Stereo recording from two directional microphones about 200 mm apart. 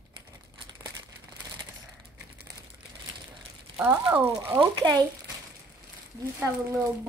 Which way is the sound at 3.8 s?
10° right (ahead or behind).